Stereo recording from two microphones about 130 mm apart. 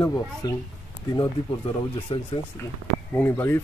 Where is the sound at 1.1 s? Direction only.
40° left (ahead or behind).